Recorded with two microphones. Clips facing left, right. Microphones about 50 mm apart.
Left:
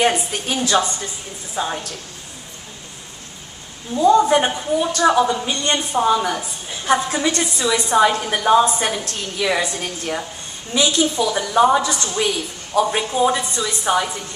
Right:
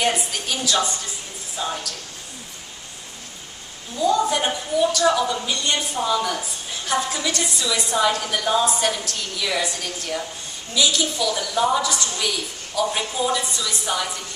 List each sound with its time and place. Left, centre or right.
0.0 s a woman's voice: left
3.9 s a woman's voice: left